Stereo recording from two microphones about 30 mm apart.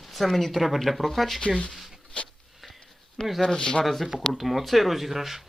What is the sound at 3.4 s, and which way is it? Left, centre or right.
Speech, left.